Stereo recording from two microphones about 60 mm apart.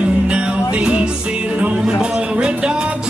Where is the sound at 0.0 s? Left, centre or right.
Centre.